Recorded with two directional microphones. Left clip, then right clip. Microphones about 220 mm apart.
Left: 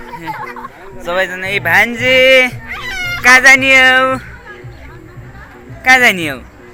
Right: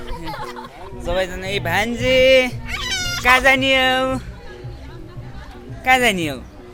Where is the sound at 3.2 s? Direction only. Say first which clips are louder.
Left 8 dB; 10° right (ahead or behind).